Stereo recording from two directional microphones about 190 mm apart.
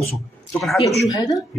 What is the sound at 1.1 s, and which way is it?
Speech, 20° left (ahead or behind).